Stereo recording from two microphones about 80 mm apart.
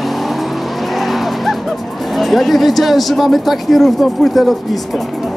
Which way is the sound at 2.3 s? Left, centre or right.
Centre.